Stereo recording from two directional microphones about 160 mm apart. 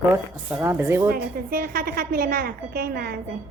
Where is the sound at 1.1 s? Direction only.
65° right (ahead or behind).